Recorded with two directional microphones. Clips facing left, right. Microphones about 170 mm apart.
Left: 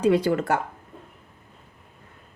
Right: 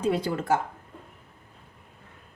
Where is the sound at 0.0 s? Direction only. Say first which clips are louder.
Left 6 dB; 70° left (ahead or behind).